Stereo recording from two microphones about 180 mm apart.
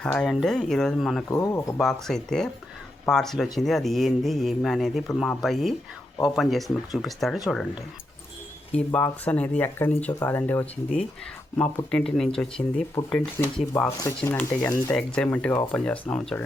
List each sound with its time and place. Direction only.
0.0 s speech: 5° left (ahead or behind)
1.3 s speech: 20° left (ahead or behind)
1.8 s speech: centre (ahead or behind)